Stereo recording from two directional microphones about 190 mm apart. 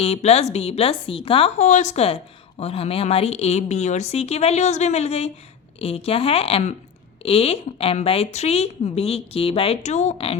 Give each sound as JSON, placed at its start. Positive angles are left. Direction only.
{"t": 0.0, "sound": "a woman's voice", "side_deg": 35}